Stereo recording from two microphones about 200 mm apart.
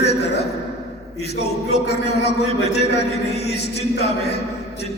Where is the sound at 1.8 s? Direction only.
55° left (ahead or behind).